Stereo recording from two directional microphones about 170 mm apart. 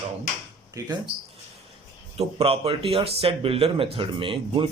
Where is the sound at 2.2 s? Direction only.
35° right (ahead or behind).